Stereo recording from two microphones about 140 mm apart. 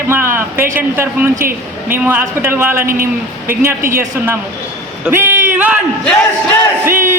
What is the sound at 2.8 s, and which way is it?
Speech, 90° right.